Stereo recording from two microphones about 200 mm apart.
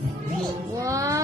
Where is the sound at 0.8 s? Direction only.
15° right (ahead or behind).